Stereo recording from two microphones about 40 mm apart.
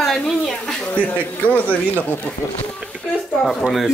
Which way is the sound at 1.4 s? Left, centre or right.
Left.